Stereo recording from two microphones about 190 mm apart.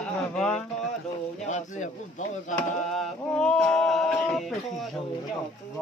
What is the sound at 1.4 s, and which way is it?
Speech, 40° left (ahead or behind).